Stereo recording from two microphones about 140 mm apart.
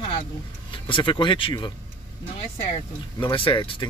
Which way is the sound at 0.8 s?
35° left (ahead or behind).